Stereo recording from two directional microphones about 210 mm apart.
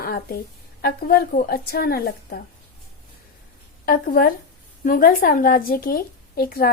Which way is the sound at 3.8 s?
40° left (ahead or behind).